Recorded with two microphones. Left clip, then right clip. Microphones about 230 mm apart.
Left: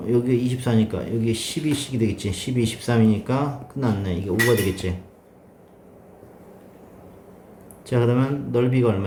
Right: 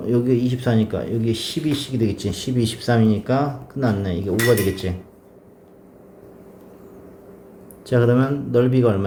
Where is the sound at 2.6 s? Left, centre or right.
Left.